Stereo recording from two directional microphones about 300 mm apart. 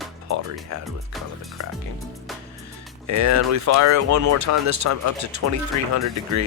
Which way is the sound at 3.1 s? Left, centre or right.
Right.